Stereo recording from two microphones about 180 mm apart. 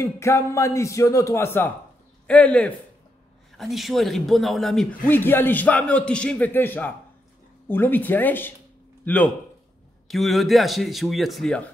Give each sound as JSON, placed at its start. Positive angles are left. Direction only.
{"t": 0.0, "sound": "a man's voice", "side_deg": 15}